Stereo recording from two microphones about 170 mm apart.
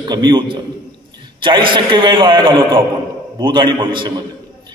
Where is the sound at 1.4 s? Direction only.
30° right (ahead or behind).